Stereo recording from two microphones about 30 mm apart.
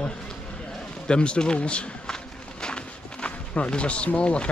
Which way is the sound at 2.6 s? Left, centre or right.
Left.